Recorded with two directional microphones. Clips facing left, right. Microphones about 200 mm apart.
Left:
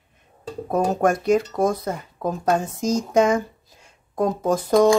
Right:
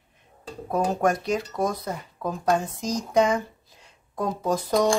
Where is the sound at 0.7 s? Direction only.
50° left (ahead or behind).